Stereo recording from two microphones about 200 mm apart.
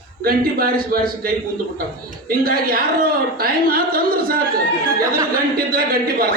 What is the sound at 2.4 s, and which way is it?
Speech, 45° right (ahead or behind).